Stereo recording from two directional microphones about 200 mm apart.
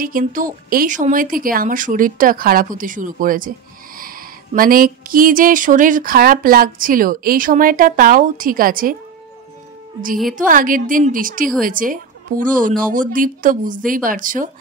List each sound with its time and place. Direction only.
0.0 s speech: 45° right (ahead or behind)
10.3 s speech: 45° right (ahead or behind)